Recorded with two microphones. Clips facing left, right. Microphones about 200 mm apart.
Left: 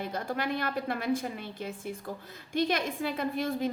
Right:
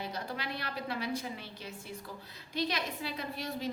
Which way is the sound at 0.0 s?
50° left (ahead or behind).